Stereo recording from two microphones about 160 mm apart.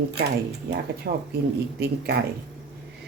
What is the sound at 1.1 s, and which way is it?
Speech, 80° right.